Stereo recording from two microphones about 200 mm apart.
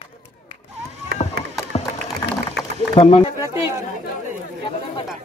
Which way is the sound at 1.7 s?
30° left (ahead or behind).